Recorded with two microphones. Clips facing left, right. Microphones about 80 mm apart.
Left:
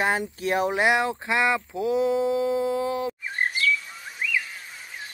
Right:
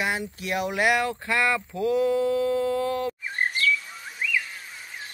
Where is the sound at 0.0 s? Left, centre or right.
Left; by 3.2 s centre.